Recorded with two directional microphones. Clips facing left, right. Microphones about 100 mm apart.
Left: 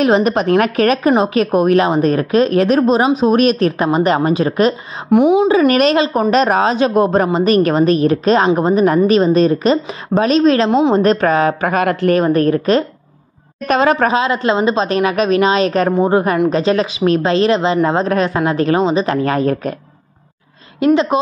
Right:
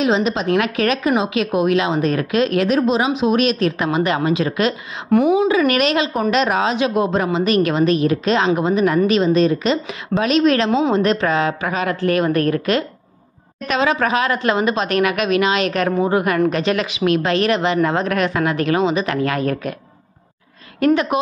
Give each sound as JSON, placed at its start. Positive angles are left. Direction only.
{"t": 0.0, "sound": "a woman's voice", "side_deg": 55}
{"t": 0.5, "sound": "a woman's voice", "side_deg": 45}
{"t": 5.1, "sound": "speech", "side_deg": 20}
{"t": 5.5, "sound": "a woman's voice", "side_deg": 35}
{"t": 11.0, "sound": "a woman's voice", "side_deg": 45}
{"t": 12.2, "sound": "a woman's voice", "side_deg": 30}
{"t": 13.7, "sound": "a woman's voice", "side_deg": 45}
{"t": 14.1, "sound": "a woman's voice", "side_deg": 25}
{"t": 20.8, "sound": "speech", "side_deg": 25}